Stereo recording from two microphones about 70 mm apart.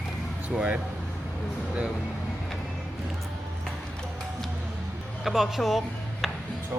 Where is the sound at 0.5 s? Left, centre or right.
Centre.